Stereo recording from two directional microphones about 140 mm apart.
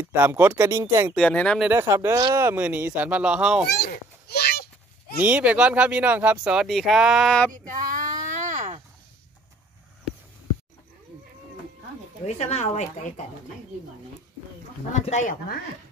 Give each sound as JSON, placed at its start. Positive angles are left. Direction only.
{"t": 0.0, "sound": "speech", "side_deg": -15}
{"t": 1.1, "sound": "speech", "side_deg": 5}
{"t": 1.7, "sound": "speech", "side_deg": -20}
{"t": 5.2, "sound": "speech", "side_deg": -10}
{"t": 7.5, "sound": "a sound", "side_deg": -75}
{"t": 12.3, "sound": "speech", "side_deg": 50}
{"t": 14.9, "sound": "speech", "side_deg": 60}